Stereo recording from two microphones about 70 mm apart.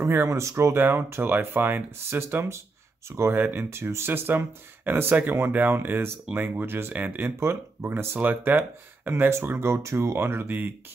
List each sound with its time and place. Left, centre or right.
0.0 s speech: right
0.7 s speech: right
7.3 s speech: right
8.2 s speech: right